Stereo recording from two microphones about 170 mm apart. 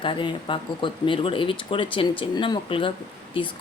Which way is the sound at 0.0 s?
30° left (ahead or behind).